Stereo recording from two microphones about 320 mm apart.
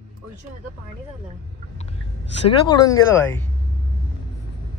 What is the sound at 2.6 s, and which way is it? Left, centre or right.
Speech, centre.